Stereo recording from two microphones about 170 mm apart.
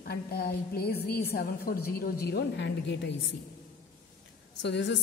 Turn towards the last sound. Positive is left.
turn(degrees=90)